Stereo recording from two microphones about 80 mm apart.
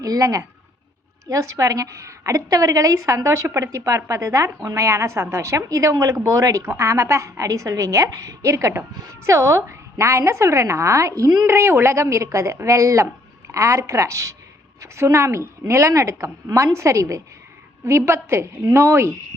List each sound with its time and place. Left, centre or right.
0.0 s a woman's voice: right